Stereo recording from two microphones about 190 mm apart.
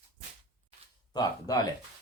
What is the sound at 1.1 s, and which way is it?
Speech, 20° left (ahead or behind).